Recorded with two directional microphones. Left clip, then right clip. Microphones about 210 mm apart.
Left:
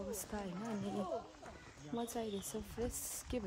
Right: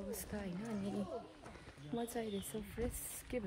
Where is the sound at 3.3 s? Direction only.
20° left (ahead or behind).